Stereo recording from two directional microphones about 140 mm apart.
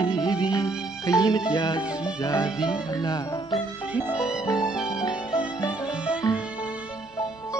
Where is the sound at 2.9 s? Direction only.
30° left (ahead or behind).